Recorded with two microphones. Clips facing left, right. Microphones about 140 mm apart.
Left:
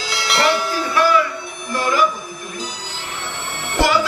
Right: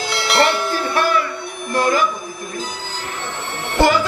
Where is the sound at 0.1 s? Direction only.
Centre (ahead or behind).